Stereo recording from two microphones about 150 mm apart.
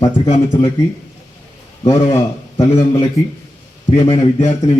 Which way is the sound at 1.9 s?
20° left (ahead or behind).